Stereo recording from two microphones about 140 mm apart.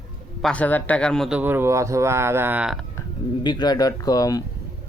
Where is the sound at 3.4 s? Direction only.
30° left (ahead or behind).